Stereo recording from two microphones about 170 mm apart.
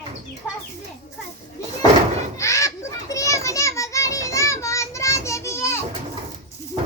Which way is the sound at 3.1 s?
20° left (ahead or behind).